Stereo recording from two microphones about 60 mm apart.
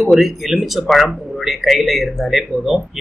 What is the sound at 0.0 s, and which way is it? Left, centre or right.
Speech, centre.